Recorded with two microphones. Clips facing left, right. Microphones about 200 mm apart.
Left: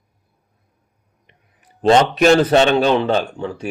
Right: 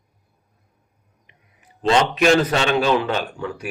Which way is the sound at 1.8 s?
45° left (ahead or behind).